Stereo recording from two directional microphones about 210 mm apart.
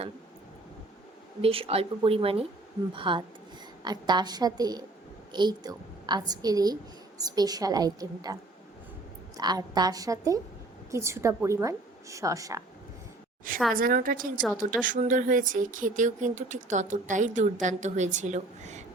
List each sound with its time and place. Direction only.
1.4 s a woman's voice: 25° right (ahead or behind)
9.4 s a woman's voice: 20° right (ahead or behind)
13.7 s speech: 40° right (ahead or behind)